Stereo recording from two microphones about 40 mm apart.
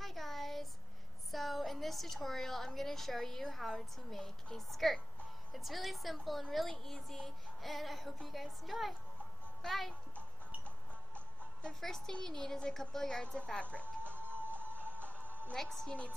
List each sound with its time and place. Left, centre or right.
0.0 s a sound: centre
1.3 s a woman's voice: centre
11.8 s a woman's voice: centre
13.4 s speech: left
14.0 s music: right
15.0 s music: left
15.5 s a woman's voice: centre